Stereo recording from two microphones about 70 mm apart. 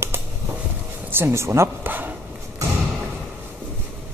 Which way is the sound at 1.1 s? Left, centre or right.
Right.